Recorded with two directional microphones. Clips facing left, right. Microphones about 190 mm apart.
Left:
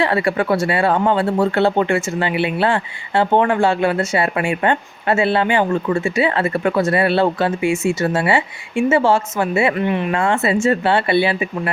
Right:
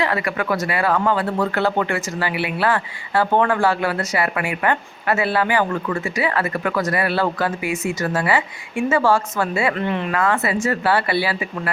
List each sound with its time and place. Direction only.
0.0 s speech: 30° left (ahead or behind)
10.1 s speech: 25° left (ahead or behind)